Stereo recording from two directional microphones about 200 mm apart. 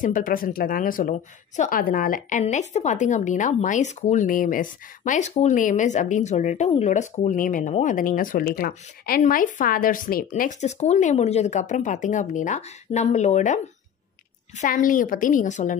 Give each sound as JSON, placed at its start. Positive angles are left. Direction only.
{"t": 0.0, "sound": "a woman's voice", "side_deg": 40}
{"t": 14.6, "sound": "a woman's voice", "side_deg": 40}